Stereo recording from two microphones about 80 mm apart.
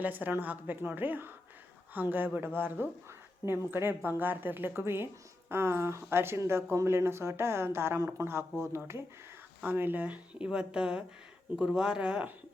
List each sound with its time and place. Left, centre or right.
0.0 s speech: right